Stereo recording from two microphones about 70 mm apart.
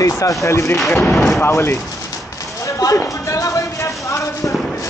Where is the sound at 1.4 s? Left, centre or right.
Left.